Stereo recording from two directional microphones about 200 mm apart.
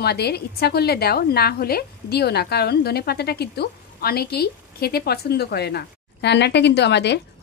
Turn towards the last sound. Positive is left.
turn(degrees=60)  # may be behind; listen again after turning